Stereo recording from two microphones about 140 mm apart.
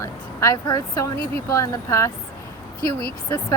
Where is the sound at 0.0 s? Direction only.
20° left (ahead or behind).